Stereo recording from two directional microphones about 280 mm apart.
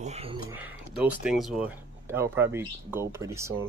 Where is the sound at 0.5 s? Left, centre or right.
Centre.